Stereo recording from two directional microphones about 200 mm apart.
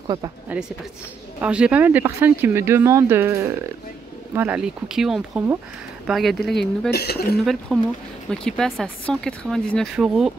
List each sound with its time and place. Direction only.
0.0 s speech: 20° right (ahead or behind)
1.4 s speech: 5° right (ahead or behind)
6.9 s speech: 55° left (ahead or behind)
7.7 s speech: 5° left (ahead or behind)